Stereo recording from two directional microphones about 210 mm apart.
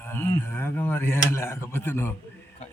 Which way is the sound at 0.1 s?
10° left (ahead or behind).